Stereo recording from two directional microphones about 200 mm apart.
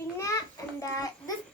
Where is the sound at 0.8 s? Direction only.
15° left (ahead or behind).